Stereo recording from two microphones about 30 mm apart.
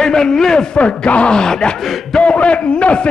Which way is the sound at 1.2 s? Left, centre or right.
Left.